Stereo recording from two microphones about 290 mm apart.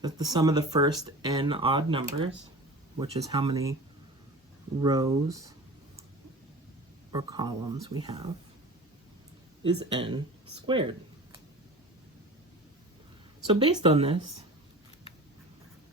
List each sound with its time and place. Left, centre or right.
0.0 s speech: centre
4.8 s speech: centre
7.1 s speech: centre
9.9 s speech: centre
10.7 s a sound: centre
13.5 s speech: centre